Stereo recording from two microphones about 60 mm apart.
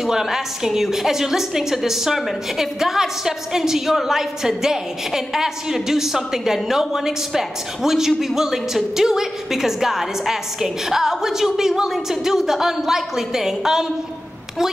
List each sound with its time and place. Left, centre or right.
0.0 s a woman's voice: centre